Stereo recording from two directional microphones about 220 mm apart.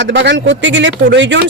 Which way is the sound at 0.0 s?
55° right (ahead or behind).